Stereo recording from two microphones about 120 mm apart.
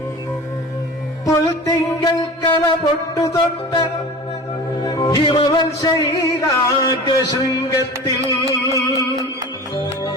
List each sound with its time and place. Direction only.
1.2 s music: 30° left (ahead or behind)